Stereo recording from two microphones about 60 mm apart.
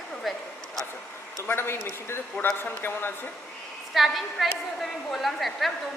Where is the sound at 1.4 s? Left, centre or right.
Left.